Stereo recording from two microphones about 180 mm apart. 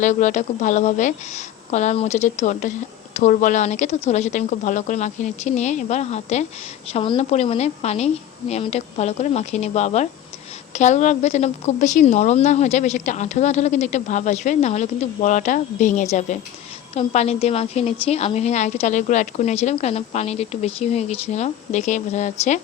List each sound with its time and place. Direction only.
0.0 s a woman's voice: 45° left (ahead or behind)